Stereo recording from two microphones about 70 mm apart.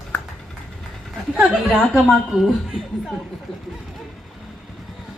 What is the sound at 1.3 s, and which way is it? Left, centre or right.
Speech, centre.